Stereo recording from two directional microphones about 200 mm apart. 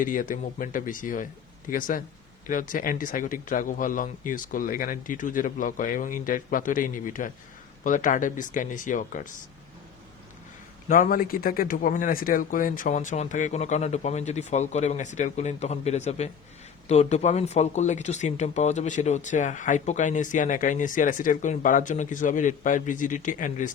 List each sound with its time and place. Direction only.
0.0 s speech: 40° left (ahead or behind)
10.8 s speech: 40° left (ahead or behind)